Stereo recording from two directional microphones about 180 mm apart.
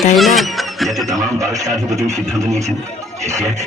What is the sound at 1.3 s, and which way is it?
Speech, 20° right (ahead or behind).